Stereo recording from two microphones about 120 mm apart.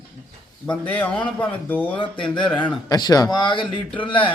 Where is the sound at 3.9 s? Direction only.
45° left (ahead or behind).